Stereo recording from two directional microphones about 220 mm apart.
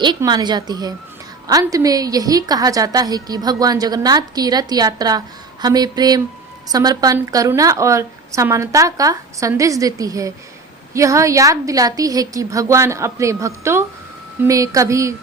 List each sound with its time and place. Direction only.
0.0 s a woman's voice: 20° right (ahead or behind)